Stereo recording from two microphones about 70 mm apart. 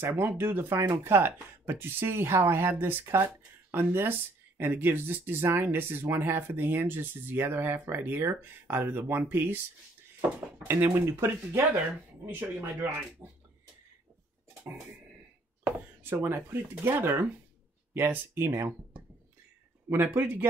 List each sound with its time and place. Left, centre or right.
0.0 s speech: right
0.7 s speech: right
10.6 s speech: right
15.6 s speech: right
19.9 s speech: right